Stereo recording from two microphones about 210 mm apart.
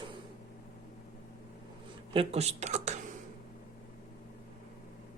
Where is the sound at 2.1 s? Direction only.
30° right (ahead or behind).